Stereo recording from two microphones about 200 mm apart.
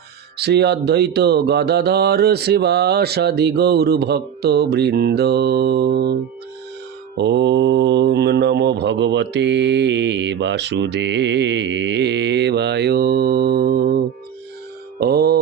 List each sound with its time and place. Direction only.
0.3 s speech: 55° right (ahead or behind)
7.2 s speech: 60° right (ahead or behind)
14.9 s mantra: 50° right (ahead or behind)